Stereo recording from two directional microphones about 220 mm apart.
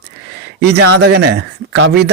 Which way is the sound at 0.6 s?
50° right (ahead or behind).